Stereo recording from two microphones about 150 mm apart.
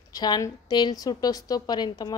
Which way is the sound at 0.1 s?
25° left (ahead or behind).